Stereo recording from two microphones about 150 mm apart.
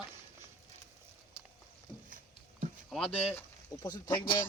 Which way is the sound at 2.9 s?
5° left (ahead or behind).